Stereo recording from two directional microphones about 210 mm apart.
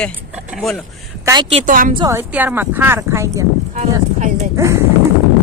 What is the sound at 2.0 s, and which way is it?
Speech, 15° right (ahead or behind).